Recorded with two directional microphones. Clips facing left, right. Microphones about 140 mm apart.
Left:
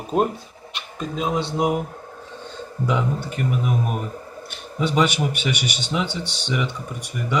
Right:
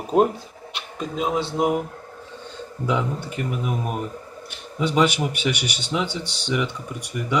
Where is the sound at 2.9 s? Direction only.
Centre (ahead or behind).